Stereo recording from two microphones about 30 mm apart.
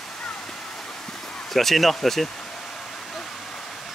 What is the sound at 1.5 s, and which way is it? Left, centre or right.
Speech, centre.